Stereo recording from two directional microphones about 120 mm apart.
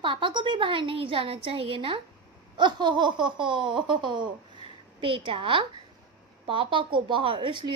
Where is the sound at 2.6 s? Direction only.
40° right (ahead or behind).